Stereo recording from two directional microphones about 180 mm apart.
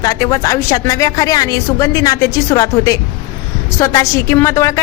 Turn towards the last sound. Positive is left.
turn(degrees=15)  # may be behind; listen again after turning